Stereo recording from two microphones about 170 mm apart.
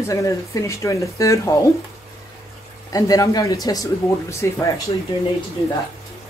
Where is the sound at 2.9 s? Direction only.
20° left (ahead or behind).